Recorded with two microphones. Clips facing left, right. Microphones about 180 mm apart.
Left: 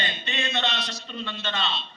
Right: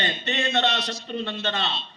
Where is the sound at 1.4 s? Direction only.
60° right (ahead or behind).